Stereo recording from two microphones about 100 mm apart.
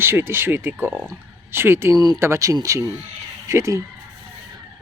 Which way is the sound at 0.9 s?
5° left (ahead or behind).